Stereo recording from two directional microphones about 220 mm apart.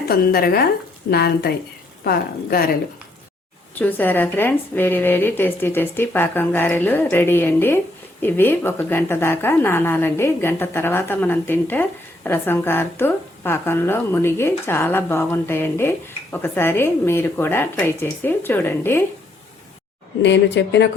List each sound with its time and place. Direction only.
0.1 s speech: 45° left (ahead or behind)
3.8 s a woman's voice: 10° left (ahead or behind)
20.2 s speech: 55° left (ahead or behind)